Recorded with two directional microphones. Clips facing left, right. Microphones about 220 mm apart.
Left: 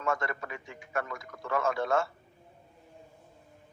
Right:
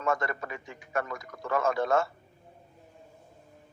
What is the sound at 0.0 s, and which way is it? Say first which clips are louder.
A man's voice: right 2 dB; 40° right (ahead or behind).